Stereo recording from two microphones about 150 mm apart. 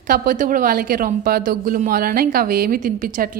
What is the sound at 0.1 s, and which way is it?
Speech, 65° right (ahead or behind).